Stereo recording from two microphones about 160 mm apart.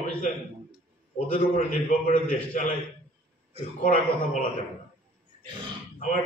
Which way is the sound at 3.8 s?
60° left (ahead or behind).